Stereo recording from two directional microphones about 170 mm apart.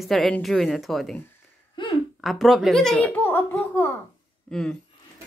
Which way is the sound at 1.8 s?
30° left (ahead or behind).